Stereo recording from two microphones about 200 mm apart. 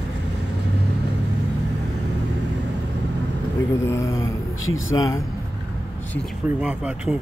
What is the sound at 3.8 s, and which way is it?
Speech, 15° left (ahead or behind).